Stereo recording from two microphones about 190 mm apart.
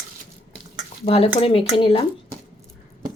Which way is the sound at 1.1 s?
30° left (ahead or behind).